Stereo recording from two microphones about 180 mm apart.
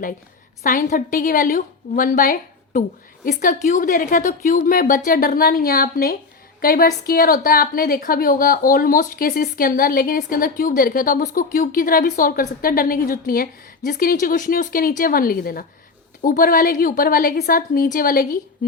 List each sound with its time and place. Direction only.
0.6 s a woman's voice: 50° left (ahead or behind)